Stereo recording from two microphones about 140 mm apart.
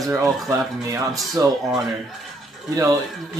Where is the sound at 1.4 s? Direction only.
25° right (ahead or behind).